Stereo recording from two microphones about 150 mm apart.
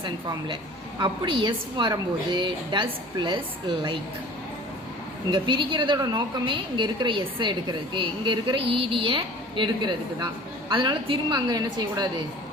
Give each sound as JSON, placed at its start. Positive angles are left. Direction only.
{"t": 0.0, "sound": "a woman's voice", "side_deg": -30}
{"t": 5.3, "sound": "a woman's voice", "side_deg": -30}